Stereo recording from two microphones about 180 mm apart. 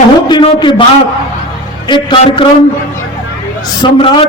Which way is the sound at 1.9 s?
25° left (ahead or behind).